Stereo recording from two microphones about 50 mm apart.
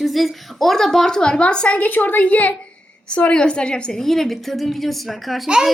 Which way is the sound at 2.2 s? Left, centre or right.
Left.